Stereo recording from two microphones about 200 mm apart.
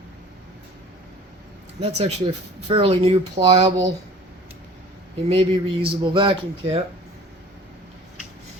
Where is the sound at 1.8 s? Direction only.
30° right (ahead or behind).